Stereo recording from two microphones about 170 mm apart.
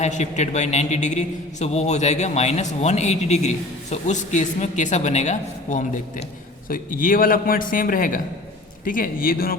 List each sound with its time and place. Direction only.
0.0 s a man's voice: 40° left (ahead or behind); by 9.6 s 60° left (ahead or behind)